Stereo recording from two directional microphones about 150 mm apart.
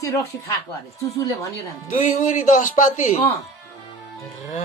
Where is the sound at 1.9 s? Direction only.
55° left (ahead or behind).